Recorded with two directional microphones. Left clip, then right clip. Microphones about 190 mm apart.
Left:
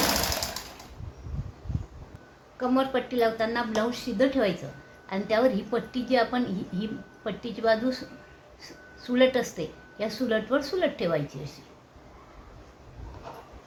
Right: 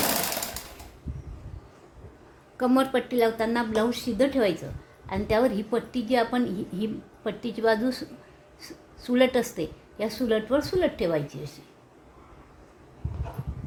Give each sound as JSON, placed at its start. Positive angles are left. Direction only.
{"t": 2.6, "sound": "a woman's voice", "side_deg": -45}
{"t": 9.0, "sound": "a woman's voice", "side_deg": -30}